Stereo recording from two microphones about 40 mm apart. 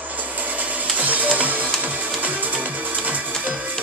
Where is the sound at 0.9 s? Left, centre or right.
Right.